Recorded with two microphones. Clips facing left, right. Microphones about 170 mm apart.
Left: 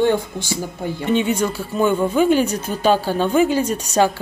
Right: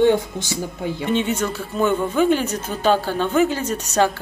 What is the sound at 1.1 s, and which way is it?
Speech, 10° left (ahead or behind).